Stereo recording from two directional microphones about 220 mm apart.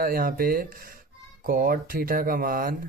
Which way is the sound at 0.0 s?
40° right (ahead or behind).